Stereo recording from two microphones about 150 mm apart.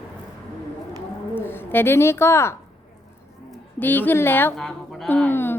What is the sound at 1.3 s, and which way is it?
A woman's voice, 15° left (ahead or behind).